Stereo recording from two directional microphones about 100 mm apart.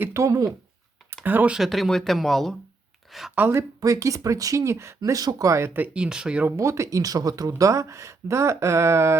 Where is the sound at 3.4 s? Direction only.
20° right (ahead or behind).